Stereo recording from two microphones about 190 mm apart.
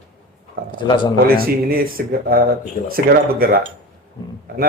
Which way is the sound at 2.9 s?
50° right (ahead or behind).